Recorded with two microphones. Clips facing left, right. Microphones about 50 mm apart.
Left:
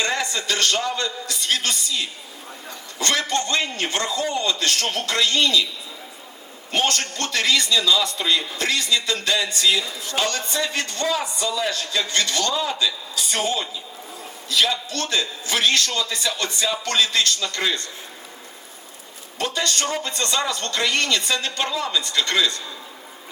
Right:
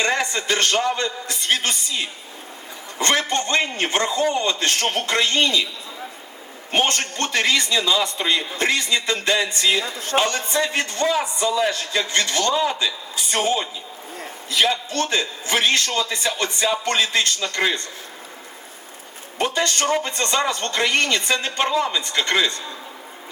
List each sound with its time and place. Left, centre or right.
0.0 s a man's voice: right
6.7 s a man's voice: right
9.8 s speech: right
10.2 s a man's voice: right
19.4 s a man's voice: right